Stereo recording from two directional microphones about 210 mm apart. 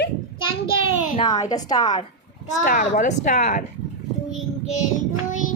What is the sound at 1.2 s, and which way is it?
Speech, 15° left (ahead or behind).